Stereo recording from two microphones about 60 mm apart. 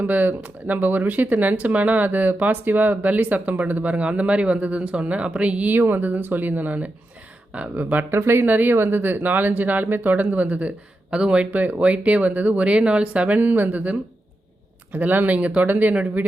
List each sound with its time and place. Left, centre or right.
0.0 s speech: right
8.1 s speech: right
8.4 s speech: right
11.5 s speech: right
14.9 s speech: right